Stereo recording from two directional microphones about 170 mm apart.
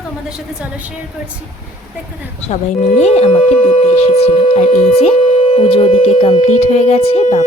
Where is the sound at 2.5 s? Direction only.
40° left (ahead or behind).